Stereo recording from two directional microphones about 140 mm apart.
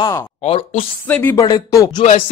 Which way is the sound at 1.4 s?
30° left (ahead or behind).